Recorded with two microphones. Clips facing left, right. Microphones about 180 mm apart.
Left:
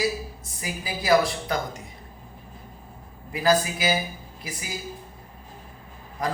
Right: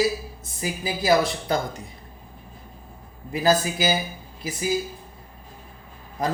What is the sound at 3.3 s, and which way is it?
Speech, 25° right (ahead or behind).